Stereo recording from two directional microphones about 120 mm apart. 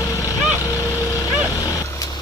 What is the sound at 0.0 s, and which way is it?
Vehicle, 30° left (ahead or behind).